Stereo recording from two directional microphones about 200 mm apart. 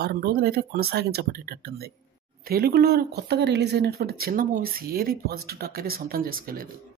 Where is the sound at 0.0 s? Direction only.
50° right (ahead or behind).